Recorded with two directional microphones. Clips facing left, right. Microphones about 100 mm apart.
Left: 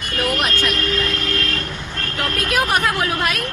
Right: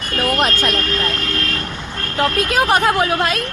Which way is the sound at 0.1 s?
30° right (ahead or behind).